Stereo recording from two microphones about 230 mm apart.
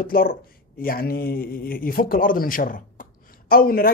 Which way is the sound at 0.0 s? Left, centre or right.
Left.